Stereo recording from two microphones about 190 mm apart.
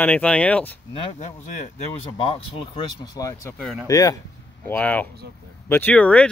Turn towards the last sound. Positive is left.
turn(degrees=5)  # may be behind; listen again after turning